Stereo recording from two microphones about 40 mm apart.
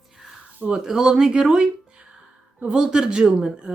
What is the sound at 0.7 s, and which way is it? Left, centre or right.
Speech, centre.